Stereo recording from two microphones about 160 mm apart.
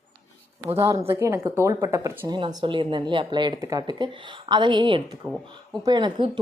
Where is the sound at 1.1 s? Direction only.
15° right (ahead or behind).